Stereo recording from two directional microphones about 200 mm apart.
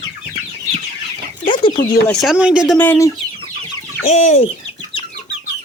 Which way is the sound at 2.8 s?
10° left (ahead or behind).